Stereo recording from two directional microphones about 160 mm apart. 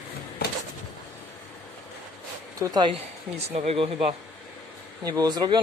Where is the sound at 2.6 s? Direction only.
25° right (ahead or behind).